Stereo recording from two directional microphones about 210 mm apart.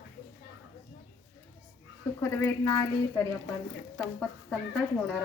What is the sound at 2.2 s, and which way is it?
A woman's voice, 15° left (ahead or behind).